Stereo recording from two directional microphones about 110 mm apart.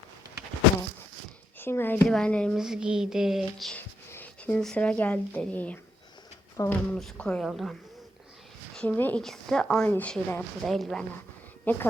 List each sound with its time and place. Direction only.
1.5 s speech: 20° left (ahead or behind)
2.0 s speech: 5° left (ahead or behind)
2.6 s speech: 5° right (ahead or behind)
3.8 s a sound: 15° left (ahead or behind)
4.6 s speech: 10° left (ahead or behind)
8.7 s a sound: 5° left (ahead or behind)
9.0 s speech: 15° left (ahead or behind)
9.2 s speech: 5° left (ahead or behind)
10.6 s speech: centre (ahead or behind)
11.6 s a woman's voice: 15° left (ahead or behind)